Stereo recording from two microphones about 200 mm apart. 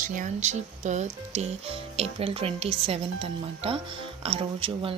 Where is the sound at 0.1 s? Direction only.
40° right (ahead or behind).